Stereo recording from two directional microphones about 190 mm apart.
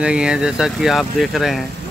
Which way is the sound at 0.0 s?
5° right (ahead or behind).